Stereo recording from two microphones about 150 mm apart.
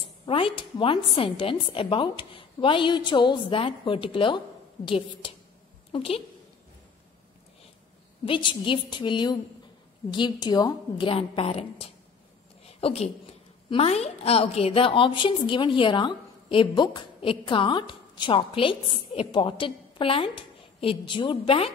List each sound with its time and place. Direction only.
0.2 s a woman's voice: 35° left (ahead or behind)
8.3 s a woman's voice: 35° left (ahead or behind)
12.6 s a sound: 45° left (ahead or behind)
13.7 s a woman's voice: 40° left (ahead or behind)